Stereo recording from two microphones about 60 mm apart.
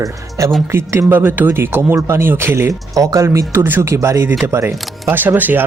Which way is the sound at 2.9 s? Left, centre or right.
Right.